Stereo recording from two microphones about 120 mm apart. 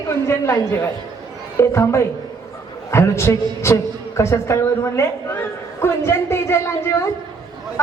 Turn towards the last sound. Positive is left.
turn(degrees=20)  # may be behind; listen again after turning